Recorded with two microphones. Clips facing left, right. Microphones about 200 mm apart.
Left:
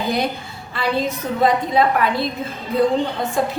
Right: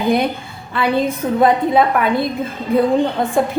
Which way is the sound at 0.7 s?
55° right (ahead or behind).